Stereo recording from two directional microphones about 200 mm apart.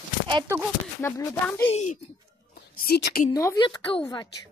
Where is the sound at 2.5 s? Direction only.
50° left (ahead or behind).